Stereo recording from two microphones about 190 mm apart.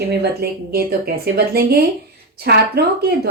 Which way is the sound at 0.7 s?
55° right (ahead or behind).